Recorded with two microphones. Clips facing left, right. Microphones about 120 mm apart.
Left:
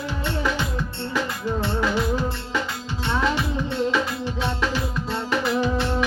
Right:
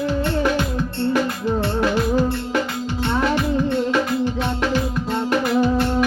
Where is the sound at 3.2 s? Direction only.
55° right (ahead or behind).